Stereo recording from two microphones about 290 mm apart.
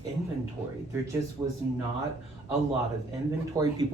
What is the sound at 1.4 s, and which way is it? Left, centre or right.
Speech, centre.